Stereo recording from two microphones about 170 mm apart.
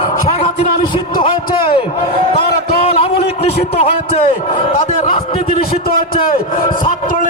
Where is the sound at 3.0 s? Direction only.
35° left (ahead or behind).